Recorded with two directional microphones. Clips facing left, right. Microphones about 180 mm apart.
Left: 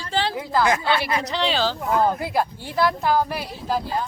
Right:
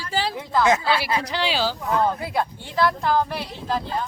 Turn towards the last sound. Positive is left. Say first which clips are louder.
# left 1 dB
turn(degrees=5)  # may be behind; listen again after turning